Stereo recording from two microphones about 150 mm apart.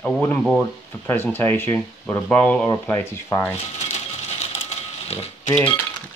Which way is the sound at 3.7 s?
50° left (ahead or behind).